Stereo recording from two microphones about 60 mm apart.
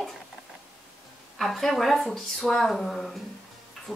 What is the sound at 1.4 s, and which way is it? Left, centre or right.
A woman's voice, centre.